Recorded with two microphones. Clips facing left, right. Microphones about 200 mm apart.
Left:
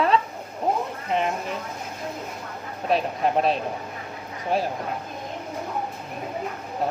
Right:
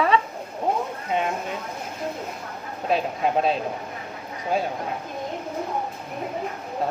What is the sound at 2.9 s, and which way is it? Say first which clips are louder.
Speech: even; centre (ahead or behind).